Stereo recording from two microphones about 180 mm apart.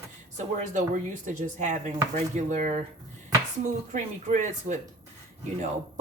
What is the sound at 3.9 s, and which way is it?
Speech, 45° right (ahead or behind).